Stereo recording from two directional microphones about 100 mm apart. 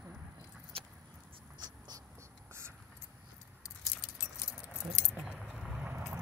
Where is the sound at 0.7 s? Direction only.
70° right (ahead or behind).